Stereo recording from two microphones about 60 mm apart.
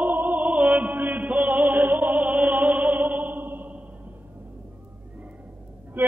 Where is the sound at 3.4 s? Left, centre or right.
Right.